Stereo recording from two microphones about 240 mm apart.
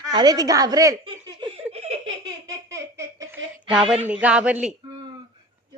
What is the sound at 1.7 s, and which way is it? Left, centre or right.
Laughter, right.